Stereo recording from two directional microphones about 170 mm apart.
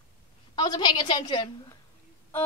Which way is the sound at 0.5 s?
25° left (ahead or behind).